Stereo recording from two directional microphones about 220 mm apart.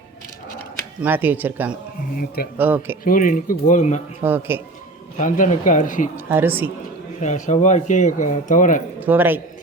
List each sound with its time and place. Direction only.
1.0 s speech: 10° right (ahead or behind)
2.1 s speech: 45° left (ahead or behind)
2.6 s speech: 10° right (ahead or behind)
3.0 s speech: 40° left (ahead or behind)
4.2 s speech: 10° right (ahead or behind)
5.1 s speech: 35° left (ahead or behind)
6.1 s speech: 10° right (ahead or behind)
7.2 s speech: 35° left (ahead or behind)
9.0 s a man's voice: 10° right (ahead or behind)